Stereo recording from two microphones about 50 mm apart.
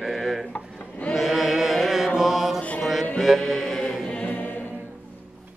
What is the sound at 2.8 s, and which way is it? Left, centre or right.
Music, centre.